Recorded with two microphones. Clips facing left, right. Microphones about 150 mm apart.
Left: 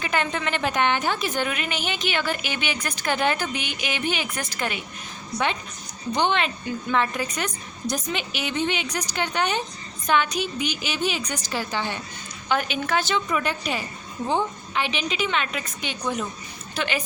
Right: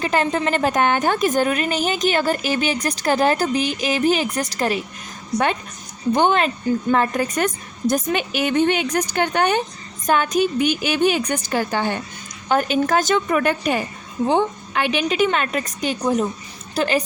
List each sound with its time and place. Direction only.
0.0 s a woman's voice: 35° right (ahead or behind)
6.1 s a woman's voice: 45° right (ahead or behind)